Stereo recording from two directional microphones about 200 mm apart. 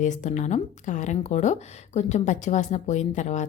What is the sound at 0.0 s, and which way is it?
Speech, 40° left (ahead or behind).